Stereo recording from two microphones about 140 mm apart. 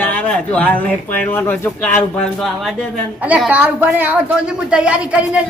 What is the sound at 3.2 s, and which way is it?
A woman's voice, 10° right (ahead or behind).